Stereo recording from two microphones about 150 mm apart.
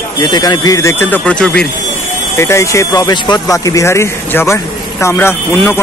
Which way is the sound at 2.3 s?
20° left (ahead or behind).